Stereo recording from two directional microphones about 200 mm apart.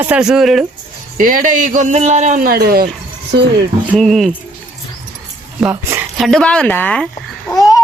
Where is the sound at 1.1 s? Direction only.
45° right (ahead or behind).